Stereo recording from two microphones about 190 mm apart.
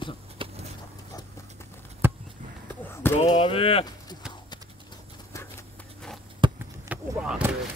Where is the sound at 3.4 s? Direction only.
30° left (ahead or behind).